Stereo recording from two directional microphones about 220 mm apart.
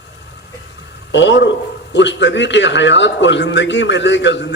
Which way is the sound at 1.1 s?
55° left (ahead or behind).